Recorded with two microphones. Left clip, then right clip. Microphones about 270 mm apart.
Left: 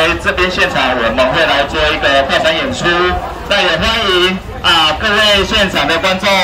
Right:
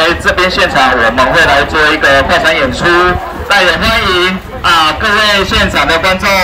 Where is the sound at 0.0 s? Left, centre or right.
Right.